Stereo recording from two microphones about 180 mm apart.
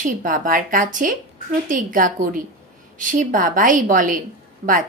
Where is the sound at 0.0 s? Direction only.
50° right (ahead or behind).